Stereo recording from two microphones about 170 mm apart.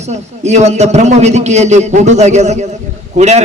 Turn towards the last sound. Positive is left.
turn(degrees=-40)  # may be behind; listen again after turning